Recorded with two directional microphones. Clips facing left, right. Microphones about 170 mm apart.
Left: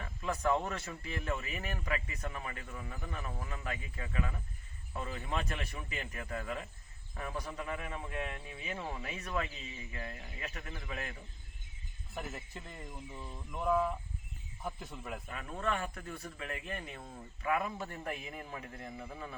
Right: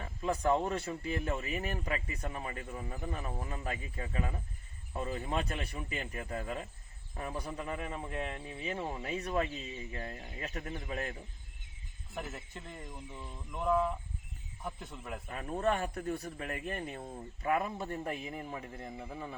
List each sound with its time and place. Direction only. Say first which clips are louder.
0.0 s a man's voice: right 2 dB; 30° right (ahead or behind)
12.1 s speech: right 1 dB; centre (ahead or behind)
15.3 s speech: right 5 dB; 30° right (ahead or behind)